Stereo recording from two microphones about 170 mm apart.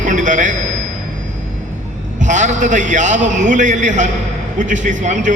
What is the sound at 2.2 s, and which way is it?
A man's voice, 45° right (ahead or behind).